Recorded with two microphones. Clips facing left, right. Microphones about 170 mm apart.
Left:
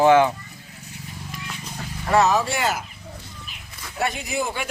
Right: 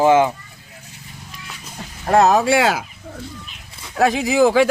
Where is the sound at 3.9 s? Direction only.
90° right.